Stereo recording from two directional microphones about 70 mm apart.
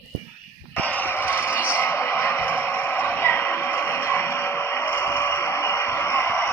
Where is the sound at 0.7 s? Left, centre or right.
Left.